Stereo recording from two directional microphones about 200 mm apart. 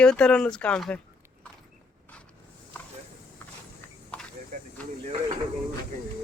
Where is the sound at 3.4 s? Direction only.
10° left (ahead or behind).